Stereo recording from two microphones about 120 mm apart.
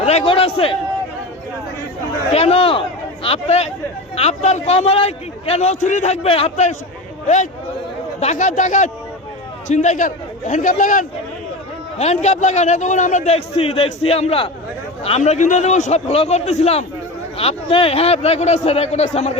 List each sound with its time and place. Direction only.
0.0 s a man's voice: 65° left (ahead or behind)
2.3 s a man's voice: 55° left (ahead or behind)
3.2 s a man's voice: 60° left (ahead or behind); by 6.1 s 85° left
6.2 s a man's voice: 55° left (ahead or behind)
8.2 s a man's voice: 75° left (ahead or behind); by 11.0 s 90° left
11.9 s a man's voice: 65° left (ahead or behind)
17.3 s a man's voice: 50° left (ahead or behind)